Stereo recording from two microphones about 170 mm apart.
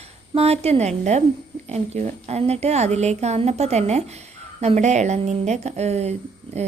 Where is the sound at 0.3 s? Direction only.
40° right (ahead or behind).